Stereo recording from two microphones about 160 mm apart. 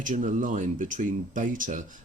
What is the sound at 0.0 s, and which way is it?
Speech, 55° right (ahead or behind).